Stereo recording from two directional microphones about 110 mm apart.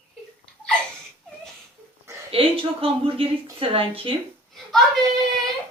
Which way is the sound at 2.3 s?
60° right (ahead or behind).